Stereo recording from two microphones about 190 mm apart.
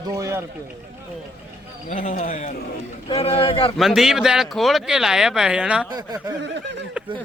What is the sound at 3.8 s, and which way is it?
Speech, centre (ahead or behind).